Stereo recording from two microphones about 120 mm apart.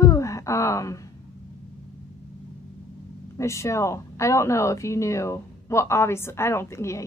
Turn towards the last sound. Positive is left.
turn(degrees=25)  # may be behind; listen again after turning